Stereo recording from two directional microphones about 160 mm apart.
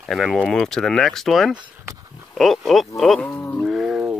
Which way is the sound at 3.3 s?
15° left (ahead or behind).